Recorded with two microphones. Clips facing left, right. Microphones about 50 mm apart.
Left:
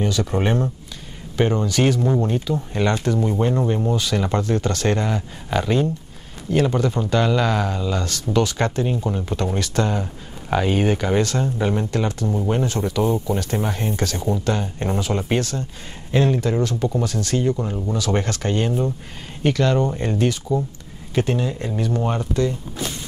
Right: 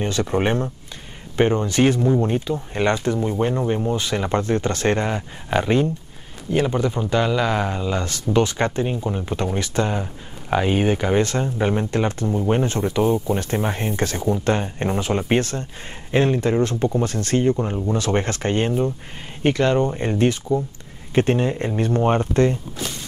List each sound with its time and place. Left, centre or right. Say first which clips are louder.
0.0 s speech: right 1 dB; right
3.3 s speech: left 1 dB; centre; by 22.6 s right